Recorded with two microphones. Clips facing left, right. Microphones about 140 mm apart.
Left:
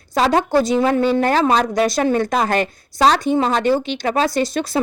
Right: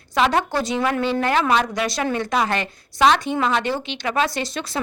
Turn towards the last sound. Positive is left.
turn(degrees=40)  # may be behind; listen again after turning